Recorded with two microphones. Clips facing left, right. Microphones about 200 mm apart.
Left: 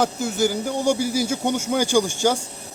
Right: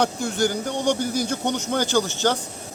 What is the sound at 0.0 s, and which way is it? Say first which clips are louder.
Speech: left 1 dB; 5° left (ahead or behind).